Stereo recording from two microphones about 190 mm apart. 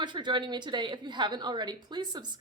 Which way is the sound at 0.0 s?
25° right (ahead or behind).